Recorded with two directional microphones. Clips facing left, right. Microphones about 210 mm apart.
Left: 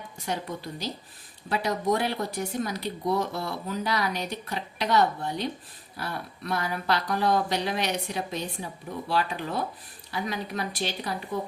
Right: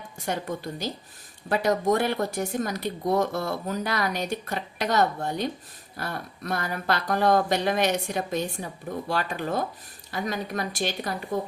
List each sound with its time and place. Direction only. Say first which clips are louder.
0.3 s speech: right 3 dB; 50° right (ahead or behind)